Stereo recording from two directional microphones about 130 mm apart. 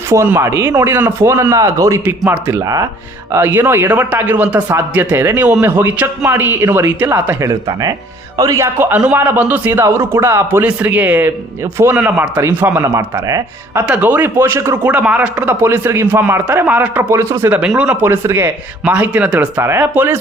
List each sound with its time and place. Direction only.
0.3 s a man's voice: 20° right (ahead or behind)
2.6 s a man's voice: 25° right (ahead or behind)
7.7 s a man's voice: 30° right (ahead or behind)
13.8 s a man's voice: 10° right (ahead or behind)